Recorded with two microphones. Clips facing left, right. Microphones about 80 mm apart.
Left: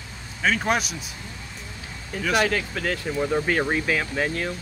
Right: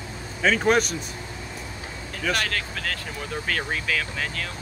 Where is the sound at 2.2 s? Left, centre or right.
Centre; by 4.5 s left.